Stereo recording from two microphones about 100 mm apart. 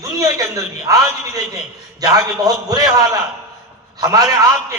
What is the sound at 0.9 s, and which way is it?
A man's voice, 35° right (ahead or behind).